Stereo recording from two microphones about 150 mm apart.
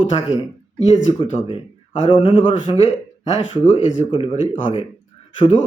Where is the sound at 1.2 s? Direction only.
35° left (ahead or behind).